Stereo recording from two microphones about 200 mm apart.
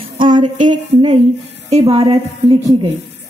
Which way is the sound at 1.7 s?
25° right (ahead or behind).